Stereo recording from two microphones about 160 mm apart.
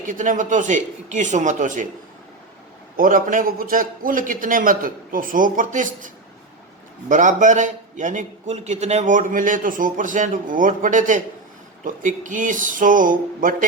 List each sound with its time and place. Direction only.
0.0 s a man's voice: 55° right (ahead or behind)
2.9 s a man's voice: 60° right (ahead or behind)
7.1 s a man's voice: 50° right (ahead or behind)